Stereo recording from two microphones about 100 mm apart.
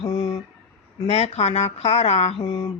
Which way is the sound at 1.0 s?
90° left.